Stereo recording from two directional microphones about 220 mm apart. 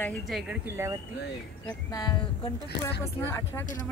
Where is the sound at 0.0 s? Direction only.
5° left (ahead or behind).